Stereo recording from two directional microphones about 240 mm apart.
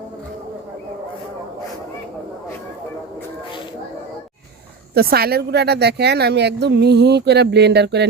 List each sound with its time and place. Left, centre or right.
4.9 s speech: right